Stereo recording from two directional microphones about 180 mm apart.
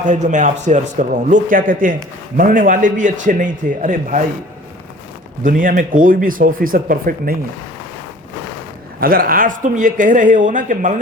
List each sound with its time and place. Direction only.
0.0 s a man's voice: 45° right (ahead or behind)
5.4 s a man's voice: 50° right (ahead or behind)
9.0 s a man's voice: 55° right (ahead or behind)